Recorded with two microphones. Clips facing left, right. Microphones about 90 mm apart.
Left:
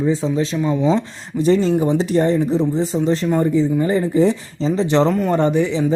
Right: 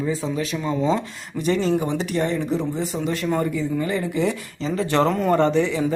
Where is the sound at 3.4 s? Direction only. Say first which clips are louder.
Left 7 dB; 25° left (ahead or behind).